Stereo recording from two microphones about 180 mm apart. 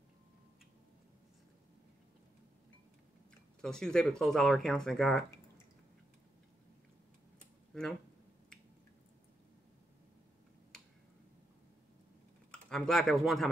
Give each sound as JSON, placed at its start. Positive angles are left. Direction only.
{"t": 3.6, "sound": "speech", "side_deg": 5}
{"t": 7.7, "sound": "a sound", "side_deg": 5}
{"t": 12.4, "sound": "speech", "side_deg": 5}